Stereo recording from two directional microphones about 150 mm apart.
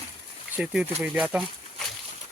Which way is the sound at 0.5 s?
5° right (ahead or behind).